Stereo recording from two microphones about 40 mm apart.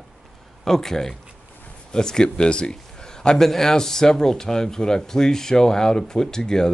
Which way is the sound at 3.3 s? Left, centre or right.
Centre.